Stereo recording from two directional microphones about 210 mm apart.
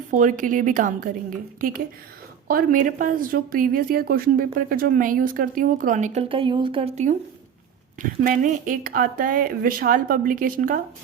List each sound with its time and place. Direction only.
0.1 s a woman's voice: 40° right (ahead or behind)
2.5 s a woman's voice: 40° right (ahead or behind)